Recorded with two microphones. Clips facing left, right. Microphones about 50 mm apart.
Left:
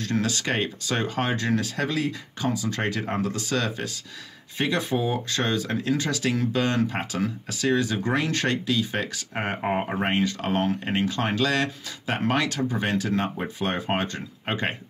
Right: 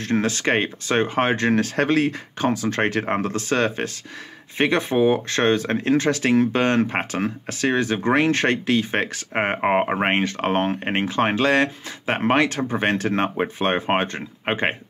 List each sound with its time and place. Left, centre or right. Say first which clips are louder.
0.0 s speech: right 5 dB; right